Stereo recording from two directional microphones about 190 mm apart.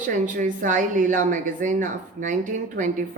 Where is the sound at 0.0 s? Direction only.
45° right (ahead or behind).